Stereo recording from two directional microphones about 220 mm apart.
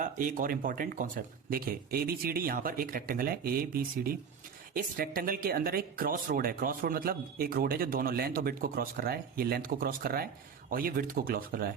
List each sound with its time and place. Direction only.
0.0 s speech: 35° right (ahead or behind)